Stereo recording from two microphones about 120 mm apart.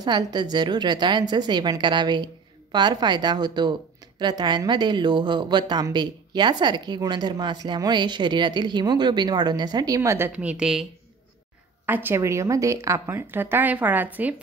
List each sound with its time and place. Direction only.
0.0 s a woman's voice: 35° right (ahead or behind); by 10.9 s 5° right (ahead or behind)
11.8 s a woman's voice: 15° right (ahead or behind)